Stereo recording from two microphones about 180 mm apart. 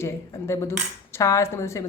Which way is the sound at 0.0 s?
15° left (ahead or behind).